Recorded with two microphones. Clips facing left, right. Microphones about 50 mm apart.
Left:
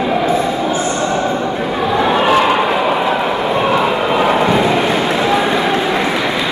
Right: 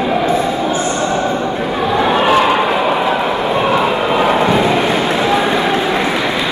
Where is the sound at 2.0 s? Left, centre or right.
Right.